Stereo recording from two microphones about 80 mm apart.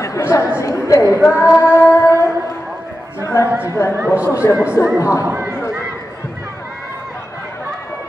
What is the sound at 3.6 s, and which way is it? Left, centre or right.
Speech, left.